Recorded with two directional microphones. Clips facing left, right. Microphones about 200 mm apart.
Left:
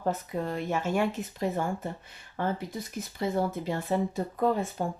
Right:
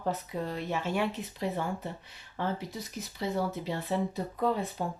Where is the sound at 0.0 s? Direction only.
50° left (ahead or behind).